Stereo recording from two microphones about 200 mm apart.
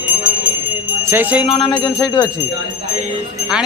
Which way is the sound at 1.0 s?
10° right (ahead or behind).